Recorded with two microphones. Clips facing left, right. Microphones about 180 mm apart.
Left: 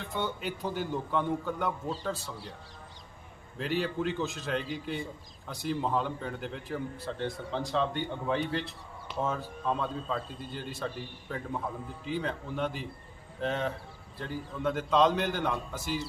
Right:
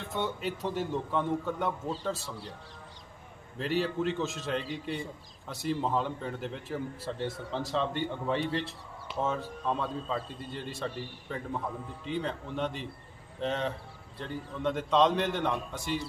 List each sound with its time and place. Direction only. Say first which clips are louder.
0.0 s a man's voice: right 1 dB; centre (ahead or behind)
3.6 s a man's voice: right 1 dB; centre (ahead or behind)